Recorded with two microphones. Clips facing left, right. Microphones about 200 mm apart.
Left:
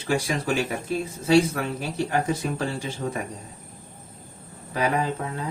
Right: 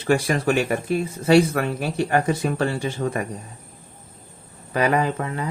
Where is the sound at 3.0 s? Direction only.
85° right.